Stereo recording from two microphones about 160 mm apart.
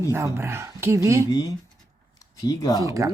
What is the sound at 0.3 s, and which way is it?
Speech, 15° right (ahead or behind).